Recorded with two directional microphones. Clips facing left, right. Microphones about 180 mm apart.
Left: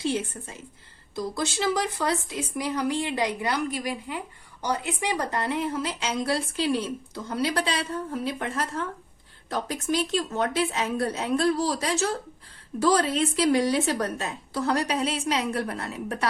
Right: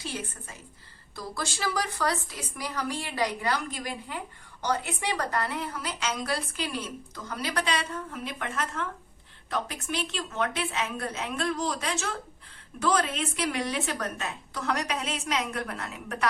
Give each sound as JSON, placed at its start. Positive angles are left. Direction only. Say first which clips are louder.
{"t": 0.0, "sound": "a woman's voice", "louder": "left 9 dB", "side_deg": 25}